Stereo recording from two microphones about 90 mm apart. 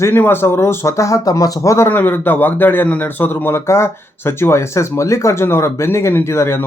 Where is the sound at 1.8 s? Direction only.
20° left (ahead or behind).